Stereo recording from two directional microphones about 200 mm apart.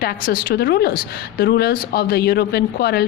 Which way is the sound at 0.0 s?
45° left (ahead or behind).